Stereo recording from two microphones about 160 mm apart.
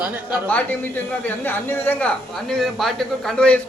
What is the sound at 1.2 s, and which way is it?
Speech, 10° left (ahead or behind).